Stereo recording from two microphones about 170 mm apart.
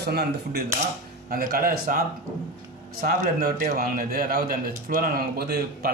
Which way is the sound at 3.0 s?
60° right (ahead or behind).